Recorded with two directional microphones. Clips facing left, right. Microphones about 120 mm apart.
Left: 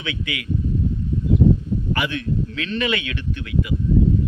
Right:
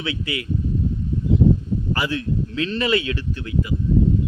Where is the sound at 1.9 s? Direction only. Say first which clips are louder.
Even; 30° right (ahead or behind).